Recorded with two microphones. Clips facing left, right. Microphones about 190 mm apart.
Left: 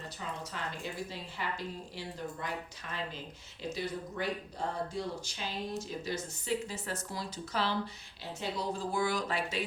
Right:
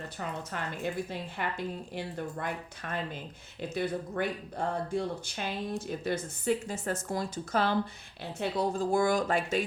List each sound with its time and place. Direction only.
0.2 s a woman's voice: 55° right (ahead or behind)